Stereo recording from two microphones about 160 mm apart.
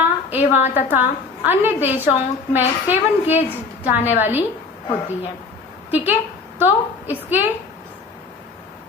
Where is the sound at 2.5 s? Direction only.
10° right (ahead or behind).